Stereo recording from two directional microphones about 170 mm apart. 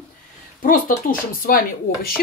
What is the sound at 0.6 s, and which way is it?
Speech, 55° left (ahead or behind).